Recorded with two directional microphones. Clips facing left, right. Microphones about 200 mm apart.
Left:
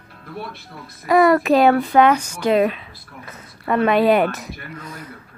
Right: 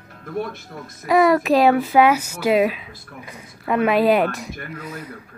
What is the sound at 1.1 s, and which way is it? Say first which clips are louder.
Speech: left 1 dB; centre (ahead or behind).